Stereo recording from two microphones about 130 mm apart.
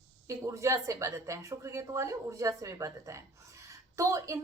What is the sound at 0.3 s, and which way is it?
A woman's voice, 25° right (ahead or behind).